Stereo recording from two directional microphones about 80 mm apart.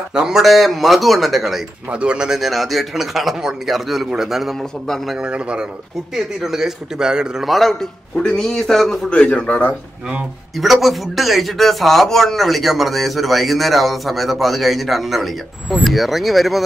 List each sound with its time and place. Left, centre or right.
0.1 s a man's voice: centre
1.9 s a man's voice: centre
5.1 s a man's voice: centre
10.5 s a man's voice: centre